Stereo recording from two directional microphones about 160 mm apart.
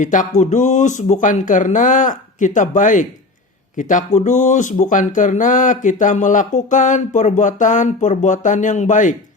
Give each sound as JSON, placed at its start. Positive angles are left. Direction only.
{"t": 0.0, "sound": "speech", "side_deg": 55}